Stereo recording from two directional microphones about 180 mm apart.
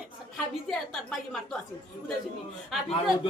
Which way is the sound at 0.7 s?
Centre (ahead or behind).